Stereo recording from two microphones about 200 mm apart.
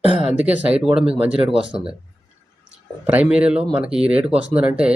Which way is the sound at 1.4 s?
25° right (ahead or behind).